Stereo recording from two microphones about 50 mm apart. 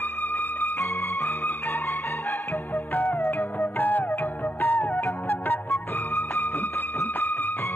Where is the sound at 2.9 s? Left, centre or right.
Left.